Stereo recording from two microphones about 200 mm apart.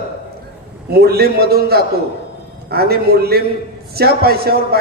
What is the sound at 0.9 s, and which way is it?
Speech, 50° right (ahead or behind).